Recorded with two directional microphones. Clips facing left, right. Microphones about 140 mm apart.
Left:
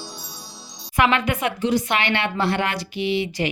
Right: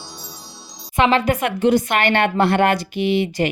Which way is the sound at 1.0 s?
30° right (ahead or behind).